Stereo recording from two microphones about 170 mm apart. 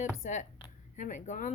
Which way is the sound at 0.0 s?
45° left (ahead or behind).